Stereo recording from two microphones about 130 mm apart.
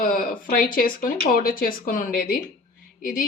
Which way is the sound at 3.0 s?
90° left.